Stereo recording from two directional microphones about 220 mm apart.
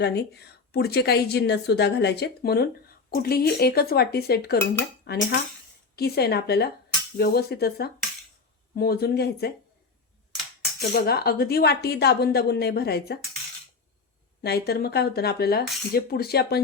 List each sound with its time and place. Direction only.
0.0 s a woman's voice: 50° left (ahead or behind)
4.5 s dishes: 10° left (ahead or behind)
6.0 s a woman's voice: 45° left (ahead or behind)
10.3 s a sound: centre (ahead or behind)
10.9 s a woman's voice: 45° left (ahead or behind)
14.4 s a woman's voice: 45° left (ahead or behind)